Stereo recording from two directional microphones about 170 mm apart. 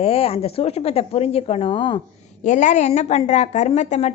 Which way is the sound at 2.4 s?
45° left (ahead or behind).